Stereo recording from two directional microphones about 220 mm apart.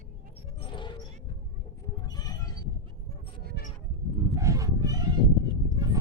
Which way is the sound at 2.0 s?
15° left (ahead or behind).